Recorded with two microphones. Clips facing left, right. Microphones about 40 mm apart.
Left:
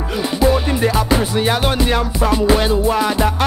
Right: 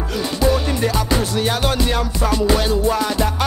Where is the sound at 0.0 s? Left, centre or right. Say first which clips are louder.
Left 3 dB; centre.